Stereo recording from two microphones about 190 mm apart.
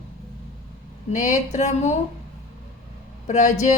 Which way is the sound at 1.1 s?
40° left (ahead or behind).